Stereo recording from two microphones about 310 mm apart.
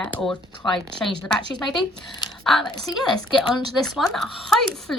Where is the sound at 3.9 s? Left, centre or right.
Centre.